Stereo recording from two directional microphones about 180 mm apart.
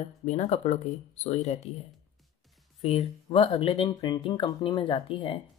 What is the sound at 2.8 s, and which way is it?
Speech, 35° left (ahead or behind).